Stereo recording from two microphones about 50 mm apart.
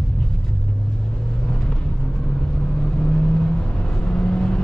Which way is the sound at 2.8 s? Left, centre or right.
Centre.